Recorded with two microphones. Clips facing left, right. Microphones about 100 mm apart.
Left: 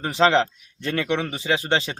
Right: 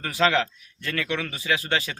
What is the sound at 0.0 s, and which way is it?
Speech, 25° left (ahead or behind).